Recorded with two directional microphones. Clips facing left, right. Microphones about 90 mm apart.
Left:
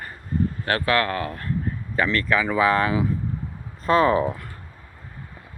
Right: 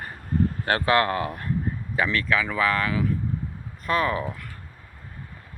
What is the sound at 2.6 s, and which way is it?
Speech, 25° left (ahead or behind).